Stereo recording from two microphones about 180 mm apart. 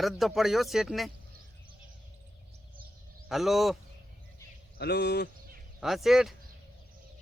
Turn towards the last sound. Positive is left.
turn(degrees=0)  # may be behind; listen again after turning